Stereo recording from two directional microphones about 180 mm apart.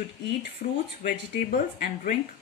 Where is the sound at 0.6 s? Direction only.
50° left (ahead or behind).